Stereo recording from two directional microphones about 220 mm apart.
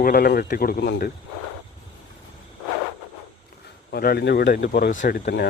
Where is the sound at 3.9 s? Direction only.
45° left (ahead or behind).